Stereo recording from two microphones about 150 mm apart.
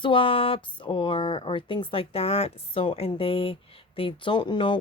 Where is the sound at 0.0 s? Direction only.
35° left (ahead or behind).